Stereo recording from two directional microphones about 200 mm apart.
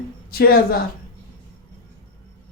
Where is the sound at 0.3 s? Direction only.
50° left (ahead or behind).